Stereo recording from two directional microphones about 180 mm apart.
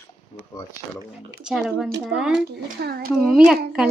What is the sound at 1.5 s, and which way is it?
Speech, centre (ahead or behind).